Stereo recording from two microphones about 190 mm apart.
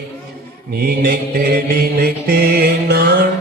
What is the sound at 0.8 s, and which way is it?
Mantra, 50° right (ahead or behind).